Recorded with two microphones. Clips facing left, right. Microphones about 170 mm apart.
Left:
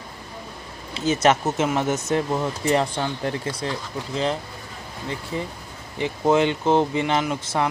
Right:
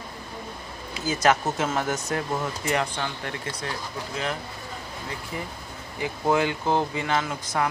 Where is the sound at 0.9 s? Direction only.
25° left (ahead or behind).